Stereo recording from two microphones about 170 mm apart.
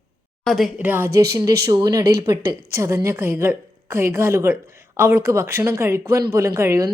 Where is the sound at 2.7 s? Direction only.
15° right (ahead or behind).